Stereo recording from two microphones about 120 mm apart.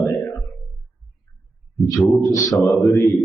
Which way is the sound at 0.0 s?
25° left (ahead or behind).